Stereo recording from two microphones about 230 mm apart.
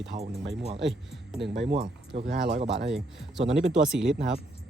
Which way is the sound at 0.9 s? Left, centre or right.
Centre.